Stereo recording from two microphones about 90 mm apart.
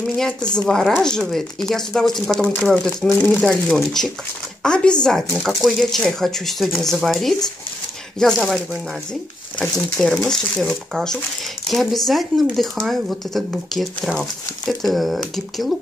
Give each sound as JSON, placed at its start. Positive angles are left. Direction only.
{"t": 0.1, "sound": "speech", "side_deg": 5}
{"t": 2.5, "sound": "speech", "side_deg": 20}
{"t": 3.0, "sound": "speech", "side_deg": 5}
{"t": 10.0, "sound": "speech", "side_deg": 5}